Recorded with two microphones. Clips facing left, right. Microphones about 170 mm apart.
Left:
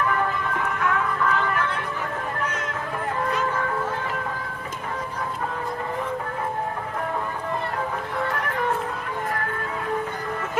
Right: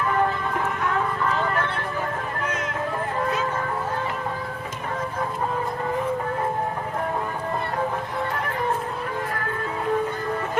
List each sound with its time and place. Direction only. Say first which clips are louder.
0.9 s music: even; 30° right (ahead or behind)